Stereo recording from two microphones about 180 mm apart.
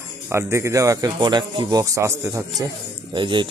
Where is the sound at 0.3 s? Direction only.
15° right (ahead or behind).